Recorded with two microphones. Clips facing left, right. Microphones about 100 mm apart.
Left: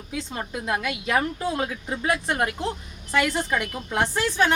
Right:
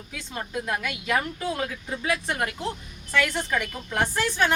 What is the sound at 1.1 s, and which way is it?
Speech, 25° left (ahead or behind).